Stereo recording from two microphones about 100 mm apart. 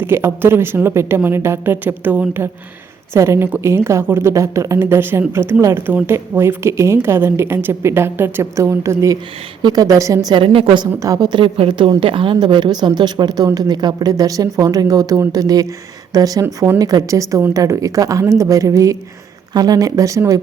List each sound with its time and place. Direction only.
0.0 s a woman's voice: 20° right (ahead or behind)
10.3 s a woman's voice: 65° right (ahead or behind)
11.0 s a woman's voice: 40° right (ahead or behind)